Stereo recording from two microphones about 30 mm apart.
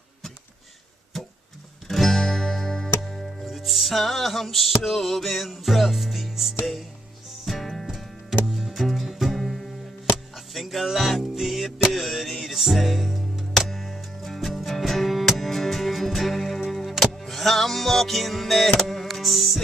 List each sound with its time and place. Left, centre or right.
1.9 s music: centre
3.1 s music: centre